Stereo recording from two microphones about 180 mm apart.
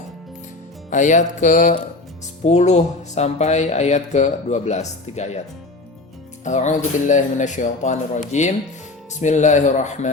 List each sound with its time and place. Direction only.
0.9 s music: 45° left (ahead or behind)
2.4 s speech: 40° left (ahead or behind)
6.4 s speech: 40° left (ahead or behind)